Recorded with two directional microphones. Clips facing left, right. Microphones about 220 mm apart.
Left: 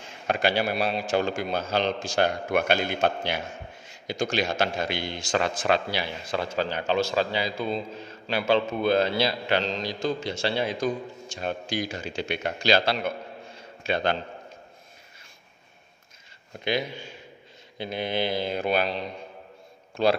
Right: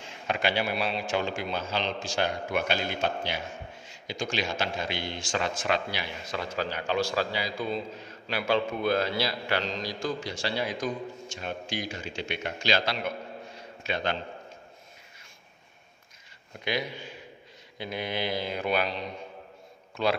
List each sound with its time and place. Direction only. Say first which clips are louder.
0.3 s a man's voice: left 4 dB; 40° left (ahead or behind)
17.7 s a man's voice: left 4 dB; 25° left (ahead or behind)